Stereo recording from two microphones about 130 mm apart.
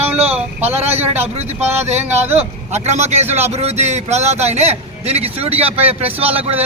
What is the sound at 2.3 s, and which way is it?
A man's voice, 55° right (ahead or behind).